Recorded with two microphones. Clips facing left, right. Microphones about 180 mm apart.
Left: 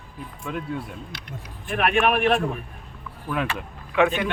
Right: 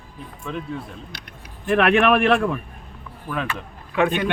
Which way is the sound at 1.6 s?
75° right (ahead or behind).